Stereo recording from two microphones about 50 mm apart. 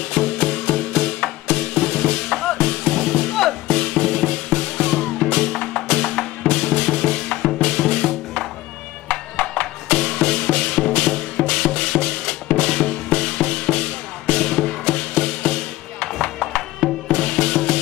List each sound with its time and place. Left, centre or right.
0.1 s music: centre
9.1 s music: centre
12.3 s drum: centre